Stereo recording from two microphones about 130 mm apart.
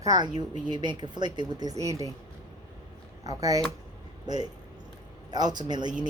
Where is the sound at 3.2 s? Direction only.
25° right (ahead or behind).